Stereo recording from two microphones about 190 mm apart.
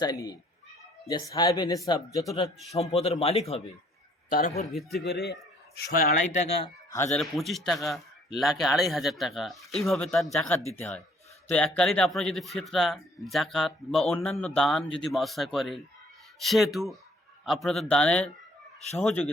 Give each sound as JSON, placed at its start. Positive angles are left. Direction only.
{"t": 0.0, "sound": "speech", "side_deg": 20}
{"t": 2.7, "sound": "speech", "side_deg": 35}
{"t": 4.9, "sound": "speech", "side_deg": 60}
{"t": 7.1, "sound": "speech", "side_deg": 0}